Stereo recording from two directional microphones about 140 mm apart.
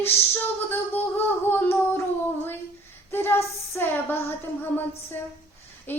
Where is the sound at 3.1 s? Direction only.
15° left (ahead or behind).